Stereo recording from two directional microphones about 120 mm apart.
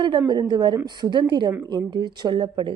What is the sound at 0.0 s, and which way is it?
A woman's voice, 40° right (ahead or behind).